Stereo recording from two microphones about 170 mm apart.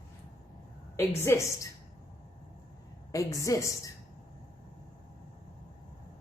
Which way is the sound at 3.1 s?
20° left (ahead or behind).